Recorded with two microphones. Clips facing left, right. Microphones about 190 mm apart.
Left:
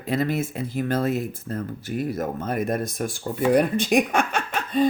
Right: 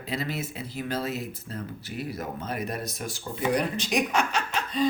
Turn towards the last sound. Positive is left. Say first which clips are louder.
# left 5 dB
turn(degrees=55)  # may be behind; listen again after turning